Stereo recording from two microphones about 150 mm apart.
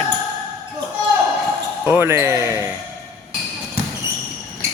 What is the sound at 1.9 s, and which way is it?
Speech, 15° right (ahead or behind).